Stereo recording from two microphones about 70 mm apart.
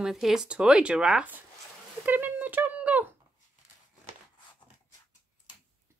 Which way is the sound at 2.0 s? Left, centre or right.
Right.